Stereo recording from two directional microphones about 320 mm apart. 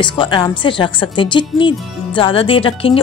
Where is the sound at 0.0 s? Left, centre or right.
Centre.